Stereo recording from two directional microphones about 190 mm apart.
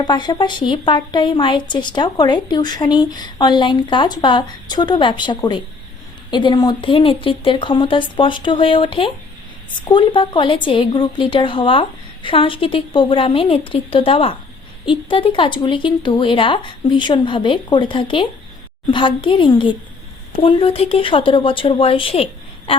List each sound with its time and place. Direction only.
0.0 s speech: 25° left (ahead or behind)